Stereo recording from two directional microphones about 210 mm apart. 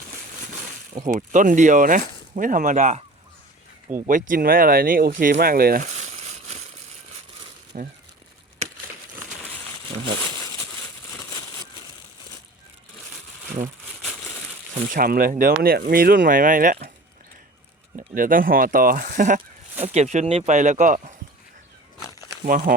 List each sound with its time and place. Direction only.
1.3 s speech: 35° right (ahead or behind)
5.3 s a sound: 45° right (ahead or behind)
7.7 s speech: 40° right (ahead or behind)
14.9 s speech: 40° right (ahead or behind)
17.9 s speech: 40° right (ahead or behind)
22.4 s speech: 40° right (ahead or behind)